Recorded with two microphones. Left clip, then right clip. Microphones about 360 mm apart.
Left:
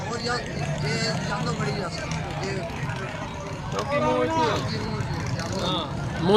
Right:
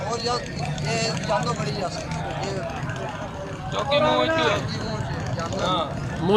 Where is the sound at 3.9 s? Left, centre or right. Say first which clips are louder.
Right 3 dB; right.